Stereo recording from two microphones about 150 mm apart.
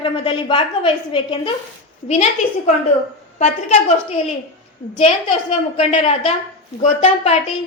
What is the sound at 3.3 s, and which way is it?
A woman's voice, 50° left (ahead or behind).